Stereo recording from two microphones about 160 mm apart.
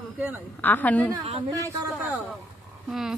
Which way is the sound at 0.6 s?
10° left (ahead or behind).